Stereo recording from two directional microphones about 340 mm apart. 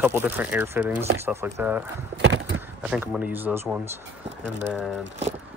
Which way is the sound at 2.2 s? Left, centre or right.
Right.